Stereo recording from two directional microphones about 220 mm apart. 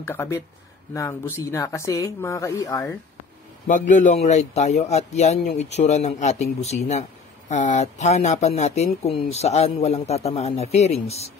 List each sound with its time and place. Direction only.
0.0 s speech: 10° left (ahead or behind)
3.6 s speech: 35° left (ahead or behind)